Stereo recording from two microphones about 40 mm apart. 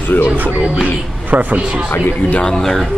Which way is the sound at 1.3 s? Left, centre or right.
Right.